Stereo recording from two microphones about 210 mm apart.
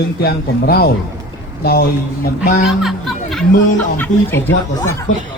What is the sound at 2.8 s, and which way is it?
Music, centre (ahead or behind).